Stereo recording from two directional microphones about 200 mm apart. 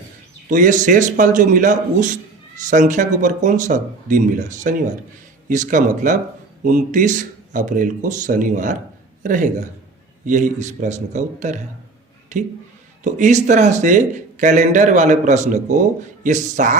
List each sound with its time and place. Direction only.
0.4 s speech: 40° right (ahead or behind)